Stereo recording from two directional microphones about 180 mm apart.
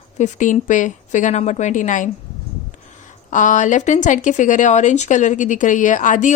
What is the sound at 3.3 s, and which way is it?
Speech, 45° left (ahead or behind).